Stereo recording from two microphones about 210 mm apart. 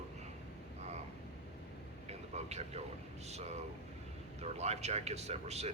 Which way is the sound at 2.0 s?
30° right (ahead or behind).